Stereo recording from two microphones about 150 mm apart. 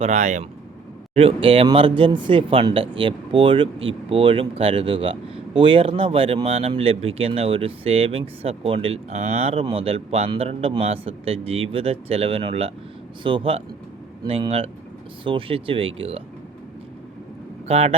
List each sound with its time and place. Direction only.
0.0 s speech: 50° right (ahead or behind)
1.1 s speech: 40° right (ahead or behind)
17.7 s speech: 45° right (ahead or behind)